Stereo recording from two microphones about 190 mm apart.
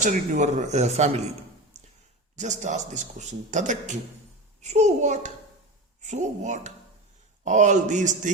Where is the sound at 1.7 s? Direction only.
35° right (ahead or behind).